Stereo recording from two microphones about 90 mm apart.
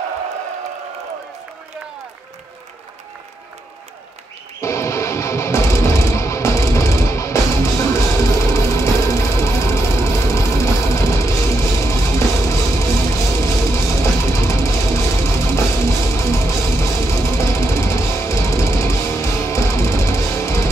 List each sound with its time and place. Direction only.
4.6 s music: 30° left (ahead or behind)